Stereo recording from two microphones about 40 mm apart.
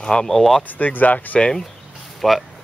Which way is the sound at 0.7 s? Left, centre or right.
Left.